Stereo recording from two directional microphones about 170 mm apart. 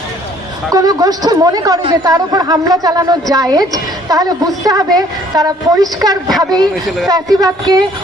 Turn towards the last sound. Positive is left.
turn(degrees=-20)  # may be behind; listen again after turning